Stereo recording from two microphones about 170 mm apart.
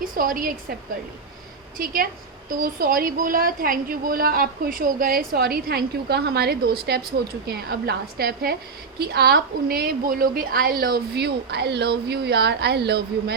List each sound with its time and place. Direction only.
0.0 s a woman's voice: 55° right (ahead or behind)
1.8 s a woman's voice: 60° right (ahead or behind); by 13.3 s 75° right (ahead or behind)